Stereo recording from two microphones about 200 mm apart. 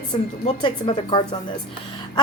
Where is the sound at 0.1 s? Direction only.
25° left (ahead or behind).